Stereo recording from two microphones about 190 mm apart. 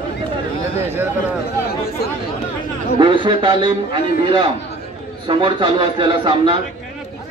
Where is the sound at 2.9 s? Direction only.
25° right (ahead or behind).